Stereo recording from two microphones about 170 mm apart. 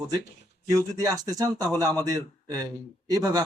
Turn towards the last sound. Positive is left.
turn(degrees=-20)  # may be behind; listen again after turning